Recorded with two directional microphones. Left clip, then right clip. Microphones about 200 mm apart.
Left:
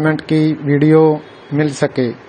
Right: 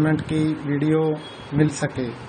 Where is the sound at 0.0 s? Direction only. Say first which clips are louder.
Left 7 dB; 40° left (ahead or behind).